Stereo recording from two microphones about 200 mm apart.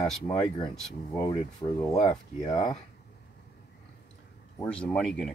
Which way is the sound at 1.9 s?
30° left (ahead or behind).